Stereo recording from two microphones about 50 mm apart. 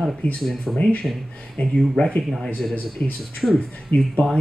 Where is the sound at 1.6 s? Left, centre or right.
Left.